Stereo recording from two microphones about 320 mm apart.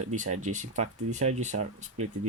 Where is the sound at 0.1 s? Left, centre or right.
Right.